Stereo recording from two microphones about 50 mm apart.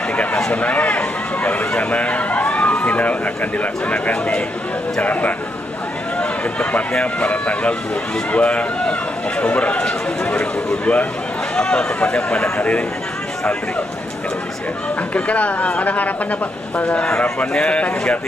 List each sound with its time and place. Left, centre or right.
0.1 s a sound: left
0.5 s speech: left
15.1 s speech: left